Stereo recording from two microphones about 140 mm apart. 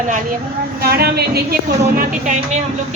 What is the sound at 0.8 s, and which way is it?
Speech, 90° right.